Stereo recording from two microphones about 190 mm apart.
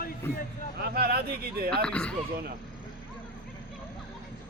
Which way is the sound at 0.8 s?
55° right (ahead or behind).